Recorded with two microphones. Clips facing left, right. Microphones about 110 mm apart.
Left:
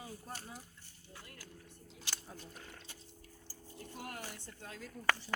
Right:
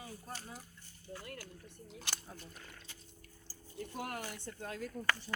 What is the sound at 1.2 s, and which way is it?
Speech, 65° right (ahead or behind).